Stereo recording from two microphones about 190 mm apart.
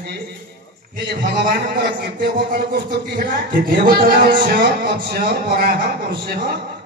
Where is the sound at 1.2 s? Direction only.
55° right (ahead or behind).